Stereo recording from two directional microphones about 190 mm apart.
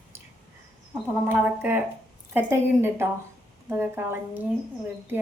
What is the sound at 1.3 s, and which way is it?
Speech, 10° right (ahead or behind).